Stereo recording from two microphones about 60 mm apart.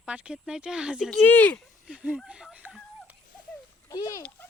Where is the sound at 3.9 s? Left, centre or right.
Left.